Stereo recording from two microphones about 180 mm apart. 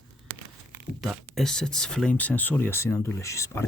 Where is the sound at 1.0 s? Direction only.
Centre (ahead or behind).